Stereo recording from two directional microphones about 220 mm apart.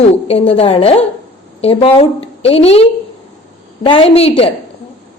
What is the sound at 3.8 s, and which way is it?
Speech, 25° left (ahead or behind).